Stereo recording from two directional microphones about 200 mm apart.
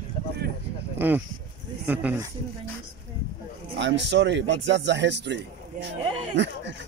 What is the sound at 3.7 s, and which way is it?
Speech, 60° right (ahead or behind).